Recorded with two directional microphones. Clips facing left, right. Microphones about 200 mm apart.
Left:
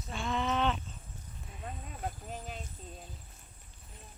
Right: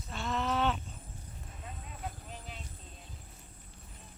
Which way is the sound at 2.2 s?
45° left (ahead or behind).